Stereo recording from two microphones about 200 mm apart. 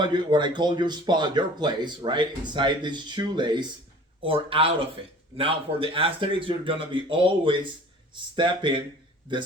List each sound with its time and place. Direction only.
0.0 s speech: 20° right (ahead or behind)